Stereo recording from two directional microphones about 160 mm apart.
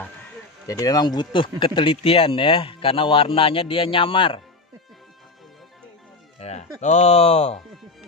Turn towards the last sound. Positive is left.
turn(degrees=40)  # may be behind; listen again after turning